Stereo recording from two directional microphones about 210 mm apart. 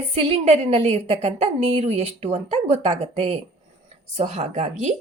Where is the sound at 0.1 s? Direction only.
30° right (ahead or behind).